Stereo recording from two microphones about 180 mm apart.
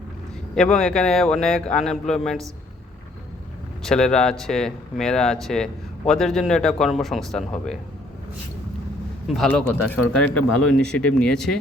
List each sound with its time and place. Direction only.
0.5 s speech: 5° left (ahead or behind)
3.8 s speech: 5° left (ahead or behind)
9.2 s a man's voice: centre (ahead or behind)